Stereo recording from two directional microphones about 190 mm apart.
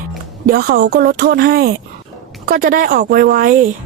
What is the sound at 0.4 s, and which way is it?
Speech, 50° right (ahead or behind).